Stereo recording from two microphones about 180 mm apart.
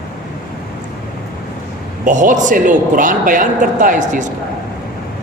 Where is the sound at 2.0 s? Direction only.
45° right (ahead or behind).